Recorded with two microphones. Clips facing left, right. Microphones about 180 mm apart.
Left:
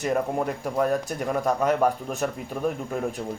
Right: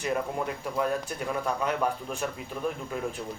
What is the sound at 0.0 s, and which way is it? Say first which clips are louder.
Speech: left 5 dB; 45° left (ahead or behind).